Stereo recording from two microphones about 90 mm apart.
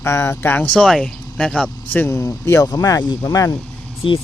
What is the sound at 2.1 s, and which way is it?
Speech, 35° left (ahead or behind).